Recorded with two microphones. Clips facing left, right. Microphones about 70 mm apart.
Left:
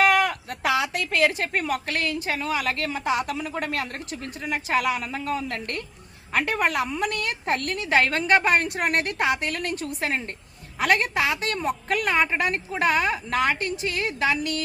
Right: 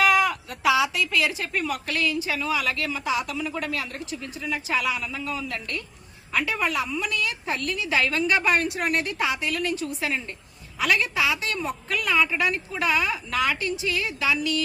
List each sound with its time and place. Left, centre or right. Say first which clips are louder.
0.3 s a woman's voice: right 2 dB; left